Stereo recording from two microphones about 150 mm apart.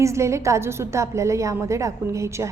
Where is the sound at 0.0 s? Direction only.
20° right (ahead or behind).